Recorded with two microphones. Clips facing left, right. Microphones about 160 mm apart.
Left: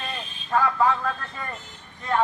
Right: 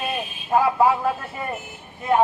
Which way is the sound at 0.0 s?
10° right (ahead or behind).